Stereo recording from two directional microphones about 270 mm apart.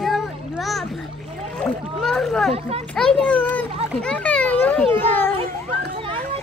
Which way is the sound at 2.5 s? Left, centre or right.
Right.